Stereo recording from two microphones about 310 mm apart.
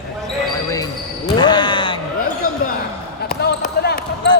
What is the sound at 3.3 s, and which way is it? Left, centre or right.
Basketball bounce, left.